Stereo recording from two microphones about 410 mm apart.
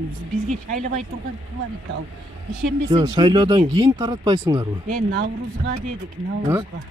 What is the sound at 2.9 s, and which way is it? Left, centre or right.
Speech, centre.